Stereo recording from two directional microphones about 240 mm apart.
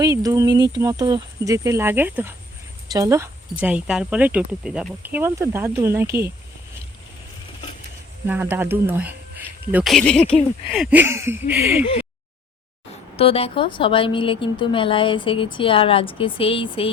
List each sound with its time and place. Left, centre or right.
0.0 s speech: centre
8.3 s speech: centre
13.1 s speech: left